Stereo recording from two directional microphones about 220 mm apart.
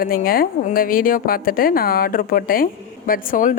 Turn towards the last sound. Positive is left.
turn(degrees=40)  # may be behind; listen again after turning